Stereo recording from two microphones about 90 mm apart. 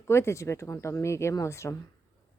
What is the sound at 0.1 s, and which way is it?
Speech, 30° left (ahead or behind).